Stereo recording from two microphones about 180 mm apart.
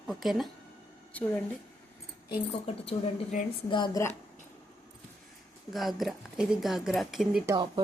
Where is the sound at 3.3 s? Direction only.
45° left (ahead or behind).